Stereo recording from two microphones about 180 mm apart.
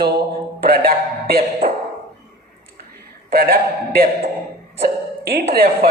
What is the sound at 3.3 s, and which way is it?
Speech, 60° right (ahead or behind).